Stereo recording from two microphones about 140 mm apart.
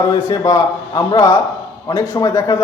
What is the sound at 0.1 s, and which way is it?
A man's voice, 25° left (ahead or behind).